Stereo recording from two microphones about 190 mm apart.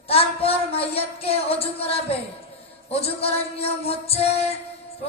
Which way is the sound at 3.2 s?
30° left (ahead or behind).